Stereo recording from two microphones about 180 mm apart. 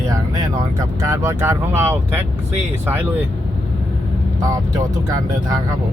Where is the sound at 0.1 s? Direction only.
20° right (ahead or behind).